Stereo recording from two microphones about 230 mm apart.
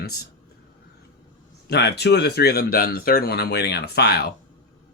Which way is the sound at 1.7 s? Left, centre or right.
Left.